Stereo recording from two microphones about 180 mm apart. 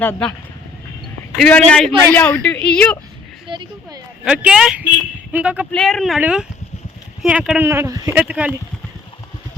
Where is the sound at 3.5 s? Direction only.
25° right (ahead or behind).